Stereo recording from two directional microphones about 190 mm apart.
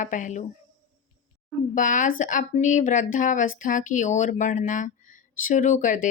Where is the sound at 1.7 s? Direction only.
40° left (ahead or behind).